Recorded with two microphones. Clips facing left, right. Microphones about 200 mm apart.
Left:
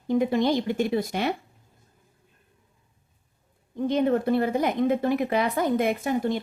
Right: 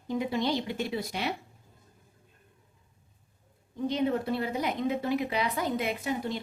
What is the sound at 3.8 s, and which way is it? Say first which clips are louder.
A woman's voice: left 5 dB; 50° left (ahead or behind).